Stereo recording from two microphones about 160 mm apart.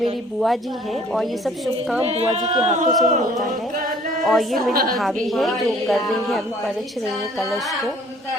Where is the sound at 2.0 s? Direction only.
40° right (ahead or behind).